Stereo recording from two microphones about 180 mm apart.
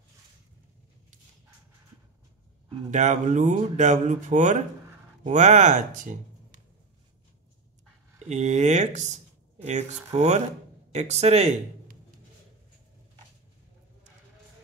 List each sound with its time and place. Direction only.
2.9 s speech: 40° right (ahead or behind)
8.3 s speech: 40° right (ahead or behind)